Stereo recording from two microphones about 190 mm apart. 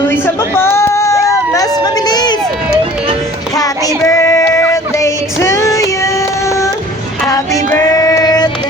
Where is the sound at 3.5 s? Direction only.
20° left (ahead or behind).